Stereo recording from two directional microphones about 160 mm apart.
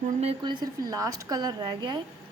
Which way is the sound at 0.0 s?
40° right (ahead or behind).